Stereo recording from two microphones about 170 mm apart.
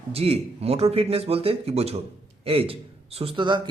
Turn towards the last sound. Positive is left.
turn(degrees=-30)  # may be behind; listen again after turning